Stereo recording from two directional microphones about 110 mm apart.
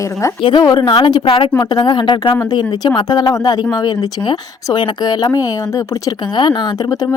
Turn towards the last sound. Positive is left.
turn(degrees=40)  # may be behind; listen again after turning